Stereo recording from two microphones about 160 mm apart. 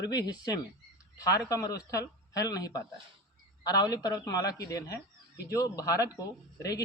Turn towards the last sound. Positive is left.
turn(degrees=20)  # may be behind; listen again after turning